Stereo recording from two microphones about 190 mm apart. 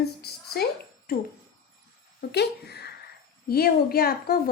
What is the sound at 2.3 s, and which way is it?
Speech, 60° left (ahead or behind).